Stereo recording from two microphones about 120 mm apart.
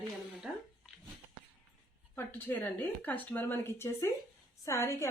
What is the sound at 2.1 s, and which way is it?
A woman's voice, 15° left (ahead or behind).